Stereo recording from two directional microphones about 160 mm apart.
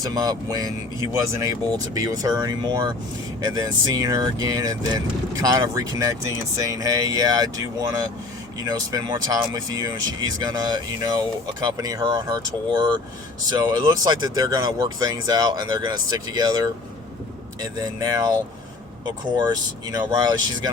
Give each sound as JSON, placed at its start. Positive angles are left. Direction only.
{"t": 0.0, "sound": "speech", "side_deg": -25}